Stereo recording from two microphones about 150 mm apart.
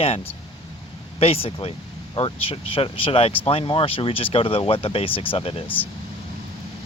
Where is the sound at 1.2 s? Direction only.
40° left (ahead or behind).